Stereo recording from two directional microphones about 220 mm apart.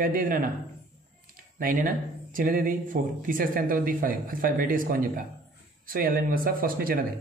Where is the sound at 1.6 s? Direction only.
40° right (ahead or behind).